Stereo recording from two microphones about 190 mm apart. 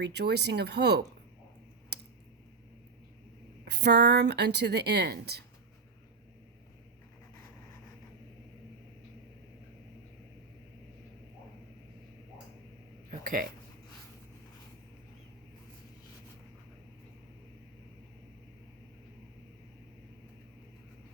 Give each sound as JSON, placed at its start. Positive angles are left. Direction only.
{"t": 0.0, "sound": "speech", "side_deg": -60}
{"t": 3.6, "sound": "speech", "side_deg": -60}
{"t": 13.1, "sound": "a sound", "side_deg": -45}